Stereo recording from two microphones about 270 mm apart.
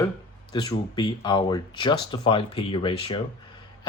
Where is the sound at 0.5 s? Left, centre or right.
Centre.